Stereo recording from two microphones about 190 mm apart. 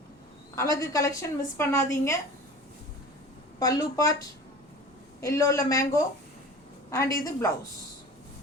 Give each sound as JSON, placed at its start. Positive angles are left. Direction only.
{"t": 0.5, "sound": "a woman's voice", "side_deg": 15}
{"t": 3.6, "sound": "a woman's voice", "side_deg": 20}